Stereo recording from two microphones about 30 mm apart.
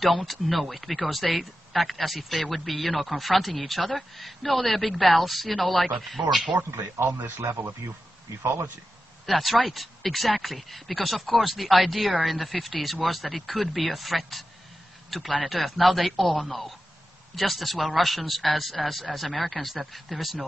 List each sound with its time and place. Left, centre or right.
0.0 s speech: centre
7.1 s speech: right
9.2 s a man's voice: centre